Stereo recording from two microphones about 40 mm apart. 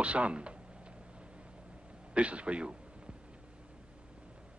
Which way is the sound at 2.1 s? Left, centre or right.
Right.